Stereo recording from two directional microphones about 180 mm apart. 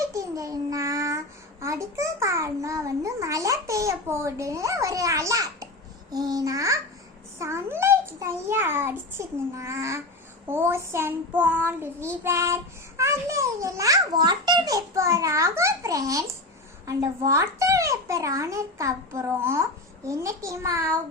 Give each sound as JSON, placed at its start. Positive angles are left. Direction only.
{"t": 0.1, "sound": "babbling", "side_deg": -20}
{"t": 1.6, "sound": "a sound", "side_deg": -15}
{"t": 7.3, "sound": "child singing", "side_deg": -15}